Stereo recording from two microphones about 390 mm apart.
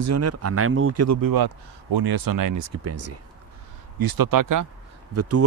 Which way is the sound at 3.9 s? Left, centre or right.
Right.